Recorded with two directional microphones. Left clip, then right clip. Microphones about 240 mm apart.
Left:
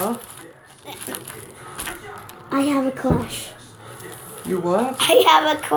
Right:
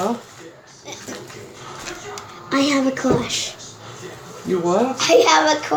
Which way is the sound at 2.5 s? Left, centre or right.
Left.